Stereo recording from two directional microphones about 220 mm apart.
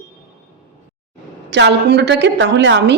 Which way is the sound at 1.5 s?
50° right (ahead or behind).